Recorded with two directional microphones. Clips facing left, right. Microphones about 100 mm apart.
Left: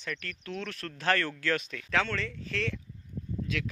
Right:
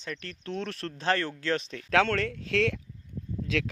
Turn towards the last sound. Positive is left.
turn(degrees=-90)